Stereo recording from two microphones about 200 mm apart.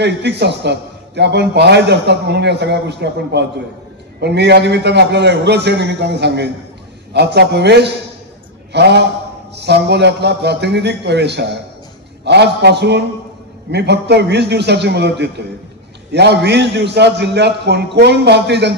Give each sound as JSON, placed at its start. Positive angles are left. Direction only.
{"t": 0.0, "sound": "a man's voice", "side_deg": -60}